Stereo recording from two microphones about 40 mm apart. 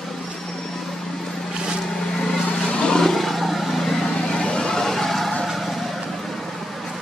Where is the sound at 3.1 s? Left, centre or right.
Centre.